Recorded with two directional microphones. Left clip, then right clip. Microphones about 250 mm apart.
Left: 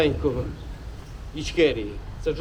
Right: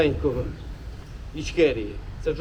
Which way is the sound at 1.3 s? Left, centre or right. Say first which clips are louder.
Even; centre.